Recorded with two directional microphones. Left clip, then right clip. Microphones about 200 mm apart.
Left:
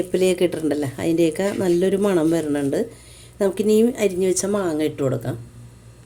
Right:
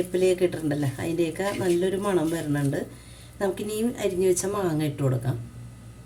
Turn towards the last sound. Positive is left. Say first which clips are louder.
# left 6 dB
turn(degrees=35)  # may be behind; listen again after turning